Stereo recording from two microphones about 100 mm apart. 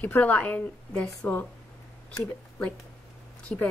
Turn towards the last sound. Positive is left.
turn(degrees=15)  # may be behind; listen again after turning